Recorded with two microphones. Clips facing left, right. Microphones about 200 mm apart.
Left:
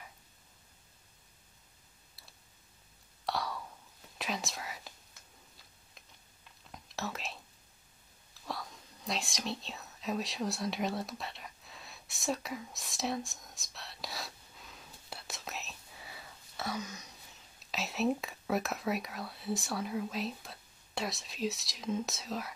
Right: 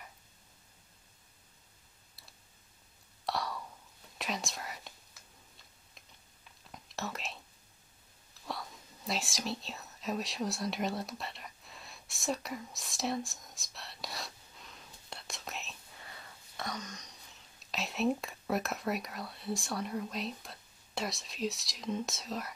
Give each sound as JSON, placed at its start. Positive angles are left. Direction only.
{"t": 3.3, "sound": "a sound", "side_deg": 0}
{"t": 4.2, "sound": "whispering", "side_deg": 0}
{"t": 6.7, "sound": "whispering", "side_deg": 0}
{"t": 8.5, "sound": "whispering", "side_deg": 0}
{"t": 17.6, "sound": "speech", "side_deg": 0}